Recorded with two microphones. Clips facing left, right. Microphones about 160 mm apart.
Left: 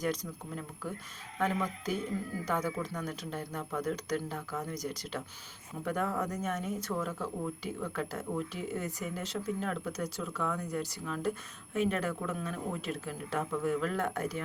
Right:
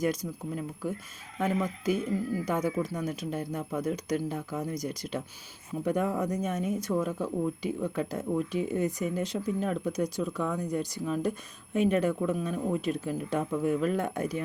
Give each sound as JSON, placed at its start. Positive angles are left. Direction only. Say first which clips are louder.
{"t": 0.0, "sound": "speech", "louder": "right 5 dB", "side_deg": -10}